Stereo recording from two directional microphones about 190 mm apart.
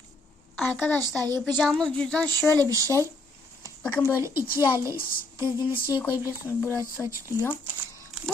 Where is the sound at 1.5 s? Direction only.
Centre (ahead or behind).